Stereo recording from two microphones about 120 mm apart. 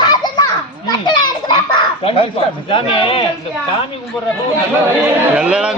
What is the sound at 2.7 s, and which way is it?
Speech, 50° left (ahead or behind).